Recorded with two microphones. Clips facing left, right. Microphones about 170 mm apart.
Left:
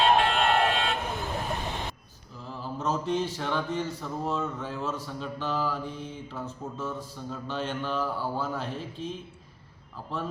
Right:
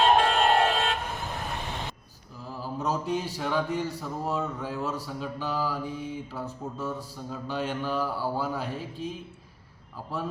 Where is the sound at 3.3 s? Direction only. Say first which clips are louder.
Right 2 dB; 5° right (ahead or behind).